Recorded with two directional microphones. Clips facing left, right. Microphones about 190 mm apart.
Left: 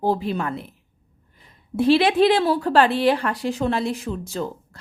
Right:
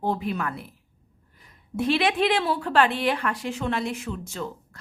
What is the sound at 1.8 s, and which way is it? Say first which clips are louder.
Speech: left 6 dB; 35° left (ahead or behind).